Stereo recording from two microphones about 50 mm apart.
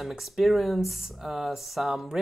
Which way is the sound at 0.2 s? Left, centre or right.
Centre.